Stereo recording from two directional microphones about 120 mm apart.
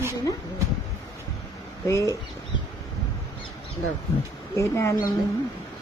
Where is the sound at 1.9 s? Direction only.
25° left (ahead or behind).